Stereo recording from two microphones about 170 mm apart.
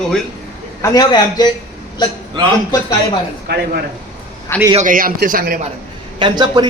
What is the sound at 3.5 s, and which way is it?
Speech, 80° right.